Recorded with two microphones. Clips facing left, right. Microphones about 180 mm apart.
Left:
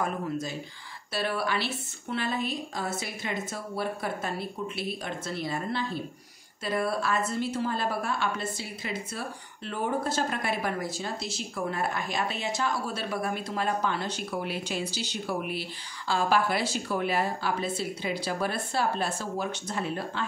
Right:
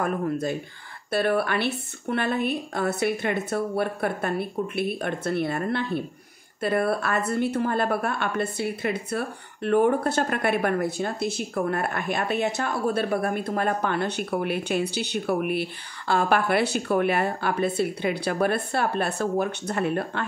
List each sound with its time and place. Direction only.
0.0 s a woman's voice: 55° right (ahead or behind)